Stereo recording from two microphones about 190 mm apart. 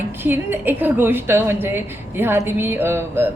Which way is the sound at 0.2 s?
10° right (ahead or behind).